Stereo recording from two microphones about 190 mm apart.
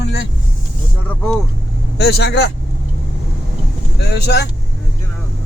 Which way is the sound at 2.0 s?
60° left (ahead or behind).